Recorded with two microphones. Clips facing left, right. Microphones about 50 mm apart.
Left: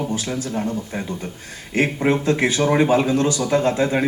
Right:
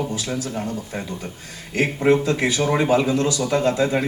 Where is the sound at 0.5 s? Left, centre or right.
Left.